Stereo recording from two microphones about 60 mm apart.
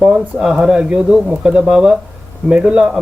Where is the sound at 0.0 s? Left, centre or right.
Centre.